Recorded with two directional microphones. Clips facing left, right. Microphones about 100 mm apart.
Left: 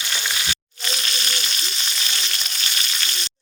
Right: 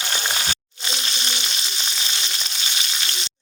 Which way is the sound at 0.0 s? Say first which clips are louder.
Right 2 dB; 35° right (ahead or behind).